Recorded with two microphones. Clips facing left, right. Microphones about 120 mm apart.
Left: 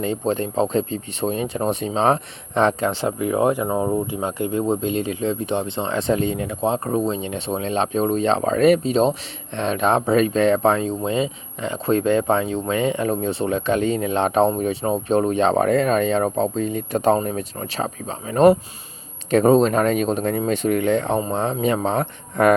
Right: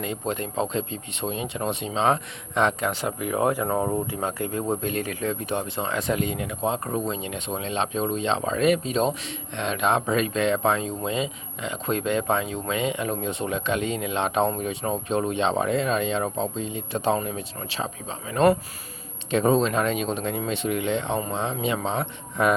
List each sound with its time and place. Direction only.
0.0 s speech: 30° left (ahead or behind)
3.7 s speech: 5° left (ahead or behind)
4.0 s speech: 20° left (ahead or behind); by 22.5 s 45° left (ahead or behind)